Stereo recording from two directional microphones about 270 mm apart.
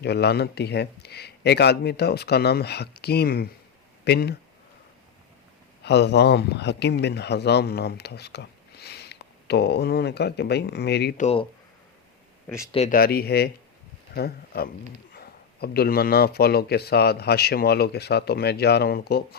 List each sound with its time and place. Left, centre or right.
0.0 s speech: left
5.8 s speech: left
12.7 s speech: left